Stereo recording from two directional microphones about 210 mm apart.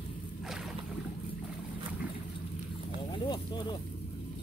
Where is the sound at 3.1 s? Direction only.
20° left (ahead or behind).